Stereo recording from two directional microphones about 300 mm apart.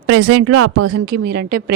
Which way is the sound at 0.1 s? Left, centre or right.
Right.